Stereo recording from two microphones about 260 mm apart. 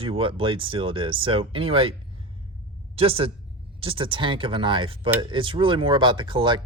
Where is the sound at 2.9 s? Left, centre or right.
Right.